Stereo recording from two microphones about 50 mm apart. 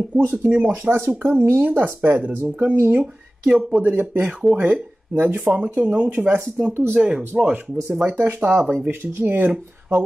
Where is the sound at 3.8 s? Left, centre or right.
Right.